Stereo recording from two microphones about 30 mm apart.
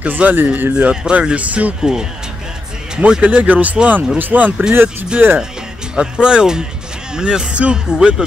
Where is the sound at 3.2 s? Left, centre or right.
Right.